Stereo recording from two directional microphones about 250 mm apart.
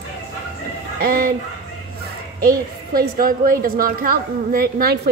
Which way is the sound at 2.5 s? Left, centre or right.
Right.